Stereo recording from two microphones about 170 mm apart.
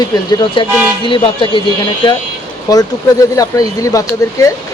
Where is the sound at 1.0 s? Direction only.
30° left (ahead or behind).